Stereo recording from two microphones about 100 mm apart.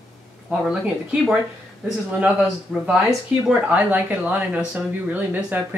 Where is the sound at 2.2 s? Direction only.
5° right (ahead or behind).